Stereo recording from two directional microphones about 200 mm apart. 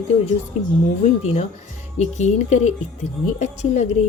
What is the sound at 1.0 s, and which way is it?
Speech, 30° left (ahead or behind).